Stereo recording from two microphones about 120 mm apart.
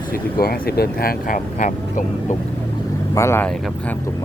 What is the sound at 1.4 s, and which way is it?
Speech, 90° left.